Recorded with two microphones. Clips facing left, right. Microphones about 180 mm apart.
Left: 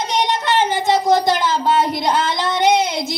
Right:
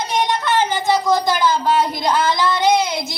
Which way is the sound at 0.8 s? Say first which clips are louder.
Left 4 dB; 25° left (ahead or behind).